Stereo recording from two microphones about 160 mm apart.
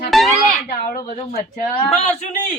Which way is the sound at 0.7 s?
65° left (ahead or behind).